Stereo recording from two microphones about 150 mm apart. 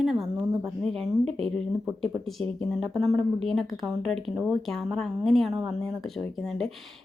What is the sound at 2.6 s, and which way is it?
Speech, centre (ahead or behind).